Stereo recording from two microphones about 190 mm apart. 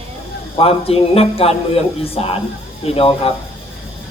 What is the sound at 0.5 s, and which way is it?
A woman's voice, 30° left (ahead or behind).